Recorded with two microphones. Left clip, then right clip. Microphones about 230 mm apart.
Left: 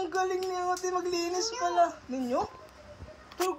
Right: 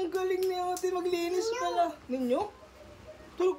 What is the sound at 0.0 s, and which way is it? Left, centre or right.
Speech, centre.